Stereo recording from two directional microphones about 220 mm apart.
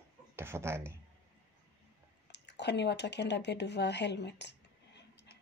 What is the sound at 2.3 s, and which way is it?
Speech, 50° left (ahead or behind).